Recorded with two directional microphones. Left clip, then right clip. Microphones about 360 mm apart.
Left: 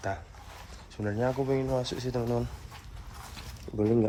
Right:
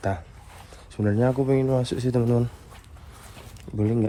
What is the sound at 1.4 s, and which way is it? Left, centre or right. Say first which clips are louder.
Speech: right 6 dB; centre.